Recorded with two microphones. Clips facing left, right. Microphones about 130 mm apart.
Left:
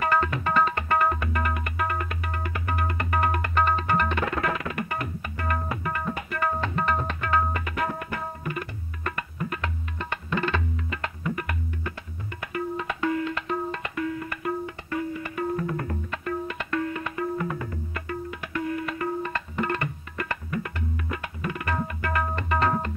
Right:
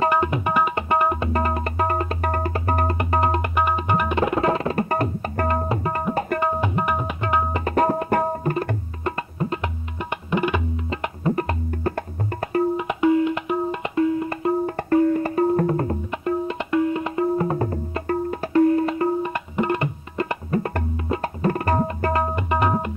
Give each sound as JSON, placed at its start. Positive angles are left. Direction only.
{"t": 0.0, "sound": "tabla", "side_deg": -20}
{"t": 1.3, "sound": "tabla", "side_deg": -30}
{"t": 2.4, "sound": "music", "side_deg": -35}
{"t": 3.0, "sound": "tabla", "side_deg": -25}
{"t": 6.4, "sound": "tabla", "side_deg": -20}
{"t": 7.6, "sound": "tabla", "side_deg": -40}
{"t": 9.0, "sound": "tabla", "side_deg": -25}
{"t": 10.9, "sound": "music", "side_deg": -30}
{"t": 12.7, "sound": "music", "side_deg": -20}
{"t": 14.7, "sound": "music", "side_deg": -45}
{"t": 16.1, "sound": "music", "side_deg": -20}
{"t": 19.3, "sound": "tabla", "side_deg": -20}
{"t": 20.9, "sound": "tabla", "side_deg": -30}
{"t": 22.3, "sound": "tabla", "side_deg": -15}